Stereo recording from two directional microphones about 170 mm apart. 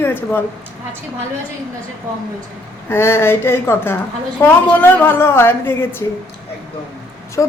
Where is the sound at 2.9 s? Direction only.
15° left (ahead or behind).